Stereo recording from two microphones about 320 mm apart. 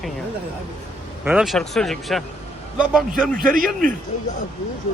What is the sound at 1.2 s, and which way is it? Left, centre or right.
A man's voice, centre.